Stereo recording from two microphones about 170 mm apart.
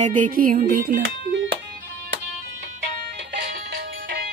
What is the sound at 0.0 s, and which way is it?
Music, 50° right (ahead or behind).